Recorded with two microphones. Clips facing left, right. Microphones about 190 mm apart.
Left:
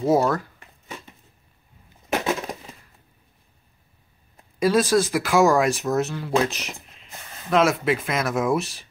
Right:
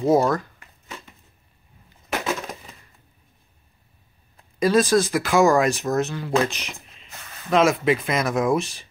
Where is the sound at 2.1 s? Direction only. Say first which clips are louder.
Left 2 dB; 20° left (ahead or behind).